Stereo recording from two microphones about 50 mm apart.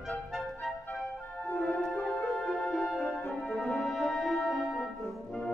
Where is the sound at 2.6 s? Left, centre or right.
Centre.